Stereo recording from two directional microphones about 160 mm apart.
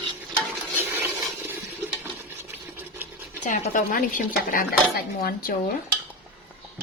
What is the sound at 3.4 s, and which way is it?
Speech, 50° left (ahead or behind).